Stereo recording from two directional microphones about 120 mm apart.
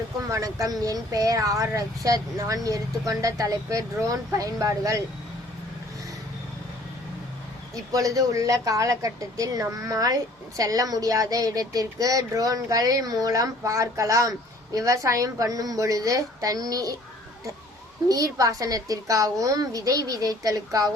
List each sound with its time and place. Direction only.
0.3 s speech: 25° right (ahead or behind)
7.9 s speech: 30° right (ahead or behind)
18.1 s speech: 30° right (ahead or behind)